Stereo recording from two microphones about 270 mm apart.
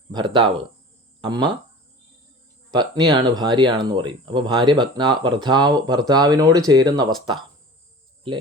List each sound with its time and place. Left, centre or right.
0.1 s speech: centre
2.7 s speech: centre